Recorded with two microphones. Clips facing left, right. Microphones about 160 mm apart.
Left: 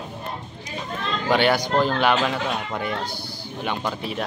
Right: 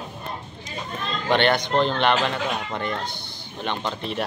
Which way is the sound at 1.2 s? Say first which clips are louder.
Left 1 dB; 5° left (ahead or behind).